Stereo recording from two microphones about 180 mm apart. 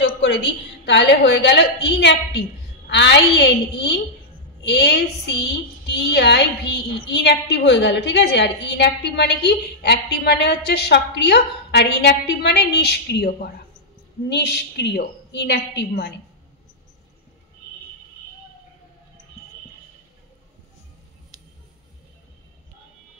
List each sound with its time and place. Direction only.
0.0 s a woman's voice: 85° left; by 15.9 s 65° left (ahead or behind)